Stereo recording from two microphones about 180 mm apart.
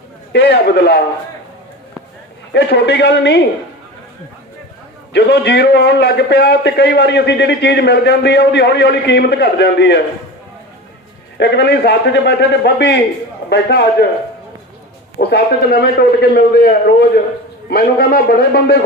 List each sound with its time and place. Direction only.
0.3 s a man's voice: 65° left (ahead or behind)
2.5 s a man's voice: 70° left (ahead or behind)
5.1 s a man's voice: 70° left (ahead or behind)
11.3 s a man's voice: 70° left (ahead or behind)
15.2 s a man's voice: 65° left (ahead or behind)